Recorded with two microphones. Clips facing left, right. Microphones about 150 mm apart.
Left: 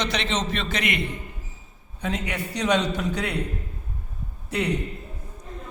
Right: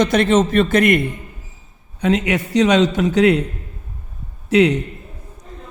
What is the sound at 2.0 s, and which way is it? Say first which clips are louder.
A man's voice: right 11 dB; 90° right.